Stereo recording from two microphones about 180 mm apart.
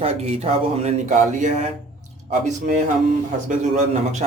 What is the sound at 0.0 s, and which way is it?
A man's voice, 35° right (ahead or behind).